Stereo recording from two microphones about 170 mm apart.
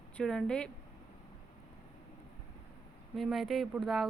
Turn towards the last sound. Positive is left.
turn(degrees=0)  # may be behind; listen again after turning